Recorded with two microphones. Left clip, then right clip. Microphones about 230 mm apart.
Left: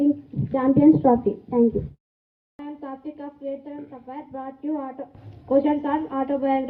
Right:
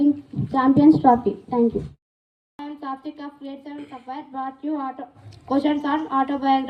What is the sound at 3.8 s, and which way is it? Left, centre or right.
A woman's voice, right.